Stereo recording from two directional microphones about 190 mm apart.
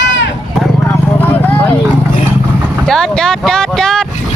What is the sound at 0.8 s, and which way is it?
Vehicle, 10° left (ahead or behind).